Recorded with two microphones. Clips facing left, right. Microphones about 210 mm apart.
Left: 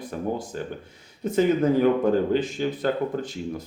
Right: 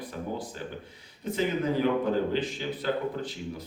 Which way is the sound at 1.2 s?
45° left (ahead or behind).